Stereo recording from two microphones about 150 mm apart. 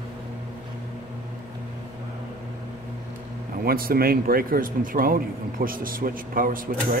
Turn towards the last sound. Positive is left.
turn(degrees=-70)  # may be behind; listen again after turning